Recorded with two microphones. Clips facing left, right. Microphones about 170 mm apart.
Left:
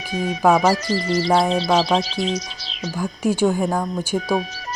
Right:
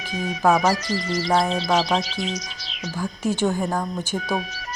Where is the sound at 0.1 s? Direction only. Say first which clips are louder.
Left 3 dB; 30° left (ahead or behind).